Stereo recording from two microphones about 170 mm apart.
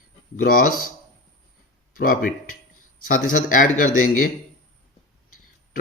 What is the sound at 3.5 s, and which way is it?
Speech, 50° left (ahead or behind).